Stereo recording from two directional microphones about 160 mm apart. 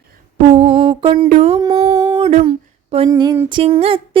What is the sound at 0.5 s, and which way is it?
Music, 35° right (ahead or behind).